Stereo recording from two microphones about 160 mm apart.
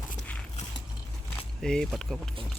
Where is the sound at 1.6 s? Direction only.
5° left (ahead or behind).